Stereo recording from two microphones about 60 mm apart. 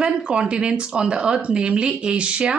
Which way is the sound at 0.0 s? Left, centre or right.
Centre.